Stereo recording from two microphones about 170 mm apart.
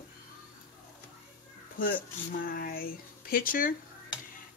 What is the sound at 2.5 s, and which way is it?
Speech, 60° left (ahead or behind).